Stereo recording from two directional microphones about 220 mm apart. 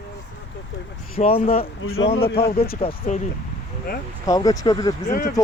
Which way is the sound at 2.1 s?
45° left (ahead or behind).